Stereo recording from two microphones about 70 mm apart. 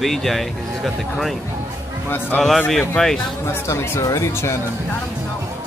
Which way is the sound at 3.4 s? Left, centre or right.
Left.